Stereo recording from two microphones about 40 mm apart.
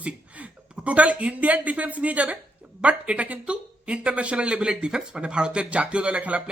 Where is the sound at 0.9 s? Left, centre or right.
Right.